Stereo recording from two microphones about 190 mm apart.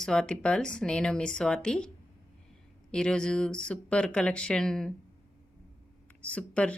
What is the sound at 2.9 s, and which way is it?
A woman's voice, 5° left (ahead or behind).